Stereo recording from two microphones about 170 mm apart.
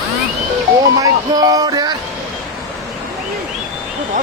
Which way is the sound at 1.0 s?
20° right (ahead or behind).